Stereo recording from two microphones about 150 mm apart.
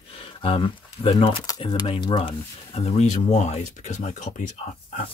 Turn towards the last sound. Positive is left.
turn(degrees=55)  # may be behind; listen again after turning